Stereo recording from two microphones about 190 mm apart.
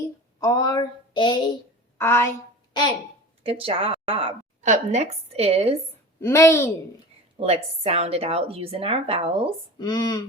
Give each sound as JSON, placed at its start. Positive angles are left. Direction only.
{"t": 0.3, "sound": "a sound", "side_deg": 20}
{"t": 2.0, "sound": "a woman's voice", "side_deg": 15}
{"t": 3.4, "sound": "a woman's voice", "side_deg": -30}
{"t": 6.1, "sound": "a woman's voice", "side_deg": 15}
{"t": 7.3, "sound": "a woman's voice", "side_deg": -30}
{"t": 9.7, "sound": "a sound", "side_deg": 20}